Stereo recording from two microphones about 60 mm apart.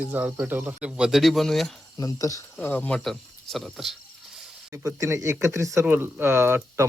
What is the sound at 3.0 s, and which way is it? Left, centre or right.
Speech, centre.